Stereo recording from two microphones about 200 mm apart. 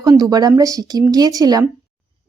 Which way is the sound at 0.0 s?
20° right (ahead or behind).